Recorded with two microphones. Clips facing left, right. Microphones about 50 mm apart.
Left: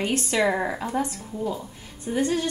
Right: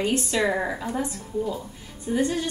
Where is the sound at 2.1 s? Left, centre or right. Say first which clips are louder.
Left 1 dB; left.